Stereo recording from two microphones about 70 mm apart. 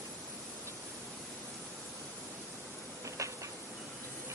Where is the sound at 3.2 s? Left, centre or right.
Right.